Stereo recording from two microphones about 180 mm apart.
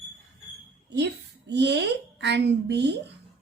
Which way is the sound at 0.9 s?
70° right (ahead or behind).